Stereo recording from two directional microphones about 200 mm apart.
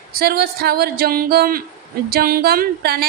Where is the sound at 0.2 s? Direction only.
50° right (ahead or behind).